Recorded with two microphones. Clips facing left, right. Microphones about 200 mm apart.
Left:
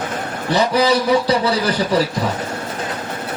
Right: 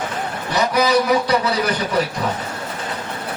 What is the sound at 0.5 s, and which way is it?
A man's voice, 30° left (ahead or behind).